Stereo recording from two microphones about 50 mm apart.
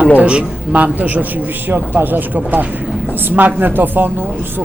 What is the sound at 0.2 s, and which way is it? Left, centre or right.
Speech, right.